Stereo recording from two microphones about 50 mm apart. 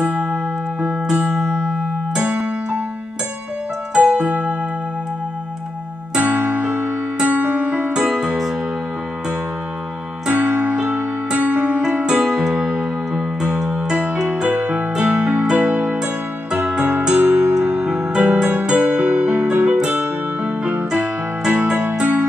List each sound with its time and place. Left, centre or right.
0.7 s music: centre
2.1 s music: right
3.9 s music: right
6.1 s music: right
10.2 s music: right
17.1 s music: right
19.5 s keyboard: right
19.9 s music: right
22.0 s music: right